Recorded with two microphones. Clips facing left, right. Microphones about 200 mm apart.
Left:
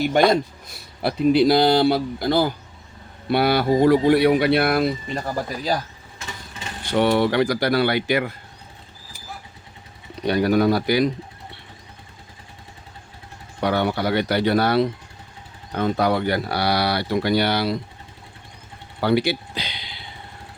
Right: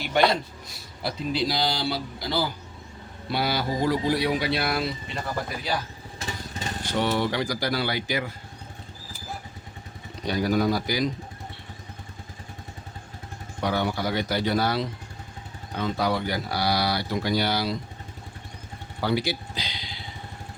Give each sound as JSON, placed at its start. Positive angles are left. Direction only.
{"t": 0.0, "sound": "speech", "side_deg": 45}
{"t": 6.9, "sound": "speech", "side_deg": 60}
{"t": 10.2, "sound": "speech", "side_deg": 65}
{"t": 13.6, "sound": "speech", "side_deg": 65}
{"t": 19.0, "sound": "speech", "side_deg": 65}